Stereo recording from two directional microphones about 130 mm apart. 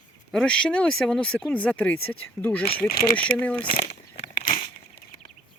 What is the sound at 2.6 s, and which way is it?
Speech, 45° left (ahead or behind).